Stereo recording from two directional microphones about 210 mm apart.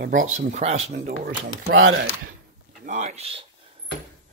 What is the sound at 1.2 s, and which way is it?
Speech, 50° right (ahead or behind).